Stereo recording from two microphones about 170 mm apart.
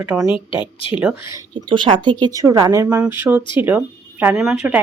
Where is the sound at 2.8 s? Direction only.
10° right (ahead or behind).